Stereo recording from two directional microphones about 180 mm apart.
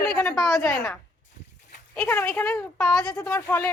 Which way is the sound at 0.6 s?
15° left (ahead or behind).